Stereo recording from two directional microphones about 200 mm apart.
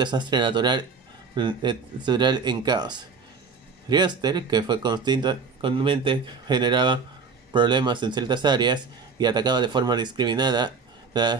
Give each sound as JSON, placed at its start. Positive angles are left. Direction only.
{"t": 0.0, "sound": "speech", "side_deg": -20}